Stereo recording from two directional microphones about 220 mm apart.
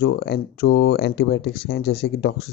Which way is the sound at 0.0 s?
50° left (ahead or behind).